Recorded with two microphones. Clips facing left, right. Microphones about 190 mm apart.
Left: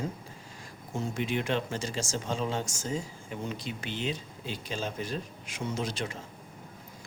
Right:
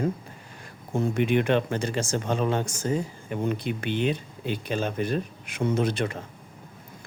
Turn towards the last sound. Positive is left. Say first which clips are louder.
# right 8 dB
turn(degrees=-60)  # may be behind; listen again after turning